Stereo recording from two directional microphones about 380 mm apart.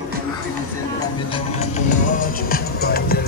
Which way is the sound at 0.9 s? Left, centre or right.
Centre.